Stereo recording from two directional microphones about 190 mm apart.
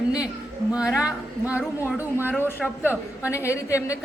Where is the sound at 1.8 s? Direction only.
15° left (ahead or behind).